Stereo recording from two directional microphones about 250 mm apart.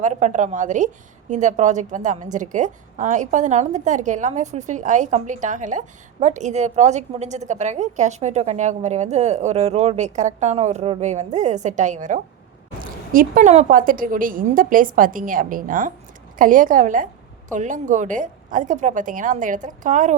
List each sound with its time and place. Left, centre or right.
0.0 s a woman's voice: right